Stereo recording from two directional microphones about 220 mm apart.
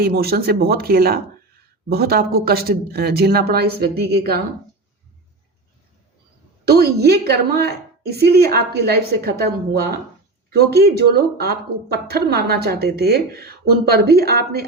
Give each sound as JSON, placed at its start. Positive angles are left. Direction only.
{"t": 0.0, "sound": "speech", "side_deg": -45}
{"t": 6.7, "sound": "speech", "side_deg": -45}